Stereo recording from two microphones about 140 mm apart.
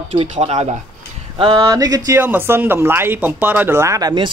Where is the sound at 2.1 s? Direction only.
15° right (ahead or behind).